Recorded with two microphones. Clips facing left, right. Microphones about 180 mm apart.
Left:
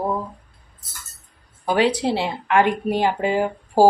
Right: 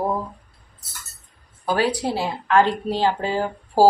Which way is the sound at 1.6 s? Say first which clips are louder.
Left 3 dB; 20° left (ahead or behind).